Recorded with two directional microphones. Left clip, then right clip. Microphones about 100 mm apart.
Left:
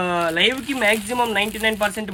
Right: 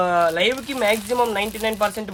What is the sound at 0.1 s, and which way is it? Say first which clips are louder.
Speech: right 1 dB; 45° right (ahead or behind).